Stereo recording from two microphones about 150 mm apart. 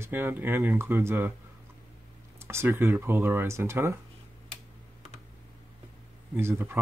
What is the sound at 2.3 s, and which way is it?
Speech, 15° right (ahead or behind).